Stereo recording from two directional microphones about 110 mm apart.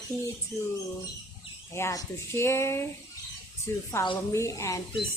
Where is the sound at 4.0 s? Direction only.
25° left (ahead or behind).